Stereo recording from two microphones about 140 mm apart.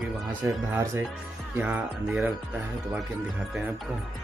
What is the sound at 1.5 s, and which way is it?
Speech, 10° right (ahead or behind).